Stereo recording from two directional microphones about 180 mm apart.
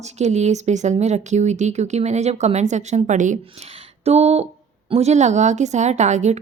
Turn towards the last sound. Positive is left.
turn(degrees=-40)  # may be behind; listen again after turning